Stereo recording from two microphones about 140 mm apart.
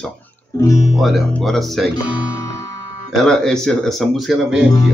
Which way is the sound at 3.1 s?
Centre (ahead or behind).